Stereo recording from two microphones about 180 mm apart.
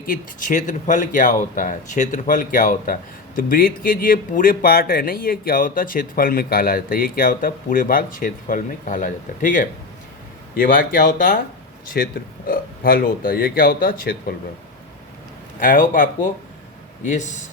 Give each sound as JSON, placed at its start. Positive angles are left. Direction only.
{"t": 0.0, "sound": "speech", "side_deg": 50}
{"t": 15.6, "sound": "speech", "side_deg": 45}